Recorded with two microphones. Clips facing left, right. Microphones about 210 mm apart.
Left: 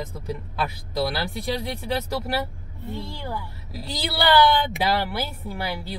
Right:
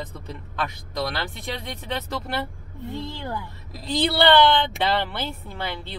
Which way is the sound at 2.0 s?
5° left (ahead or behind).